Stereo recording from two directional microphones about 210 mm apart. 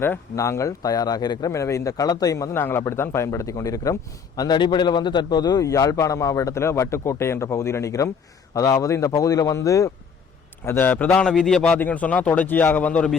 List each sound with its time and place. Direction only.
0.0 s speech: 10° left (ahead or behind)